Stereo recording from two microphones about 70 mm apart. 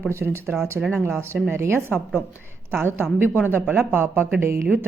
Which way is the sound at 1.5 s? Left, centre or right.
Right.